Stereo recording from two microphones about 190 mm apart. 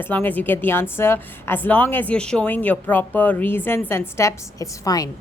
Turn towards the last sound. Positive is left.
turn(degrees=20)  # may be behind; listen again after turning